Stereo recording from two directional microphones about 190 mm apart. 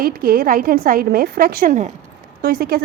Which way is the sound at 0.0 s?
50° right (ahead or behind).